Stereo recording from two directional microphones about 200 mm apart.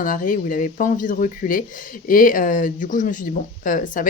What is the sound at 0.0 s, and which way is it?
A woman's voice, 40° left (ahead or behind).